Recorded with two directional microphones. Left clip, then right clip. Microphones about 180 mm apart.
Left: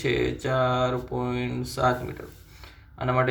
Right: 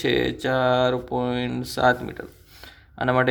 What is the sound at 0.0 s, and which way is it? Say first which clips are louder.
Speech: right 3 dB; 70° right (ahead or behind).